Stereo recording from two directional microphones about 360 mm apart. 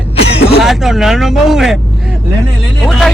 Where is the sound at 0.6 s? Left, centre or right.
Centre.